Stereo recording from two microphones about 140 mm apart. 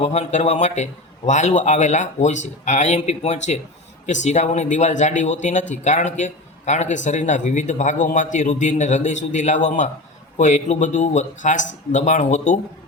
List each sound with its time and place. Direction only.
0.0 s speech: 50° left (ahead or behind)